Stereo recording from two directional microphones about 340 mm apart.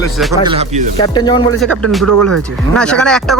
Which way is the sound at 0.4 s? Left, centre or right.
Centre.